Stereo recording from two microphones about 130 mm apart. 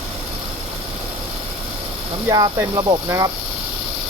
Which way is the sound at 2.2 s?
25° right (ahead or behind).